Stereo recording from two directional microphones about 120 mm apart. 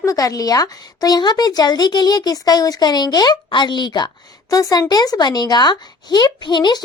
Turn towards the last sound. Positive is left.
turn(degrees=40)  # may be behind; listen again after turning